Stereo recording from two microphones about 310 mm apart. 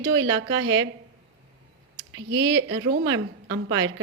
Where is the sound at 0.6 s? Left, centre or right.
Right.